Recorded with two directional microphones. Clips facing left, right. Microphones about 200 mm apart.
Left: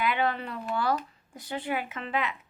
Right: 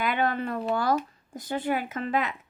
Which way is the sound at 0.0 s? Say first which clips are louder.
Right 2 dB; 45° right (ahead or behind).